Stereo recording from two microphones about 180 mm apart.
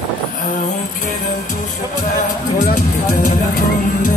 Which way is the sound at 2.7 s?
50° left (ahead or behind).